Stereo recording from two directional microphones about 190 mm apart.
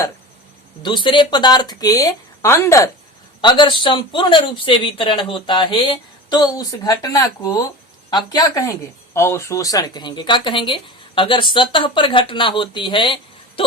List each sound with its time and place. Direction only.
0.8 s a woman's voice: 25° left (ahead or behind)